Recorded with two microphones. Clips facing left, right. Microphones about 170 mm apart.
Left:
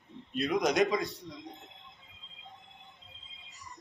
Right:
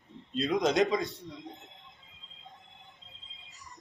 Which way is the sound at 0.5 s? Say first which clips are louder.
Right 1 dB; 20° right (ahead or behind).